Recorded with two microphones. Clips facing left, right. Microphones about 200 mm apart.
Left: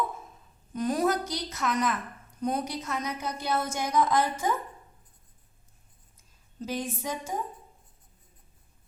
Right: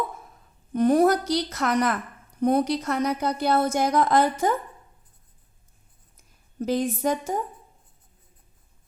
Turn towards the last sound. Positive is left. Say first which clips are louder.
# right 8 dB
turn(degrees=-70)  # may be behind; listen again after turning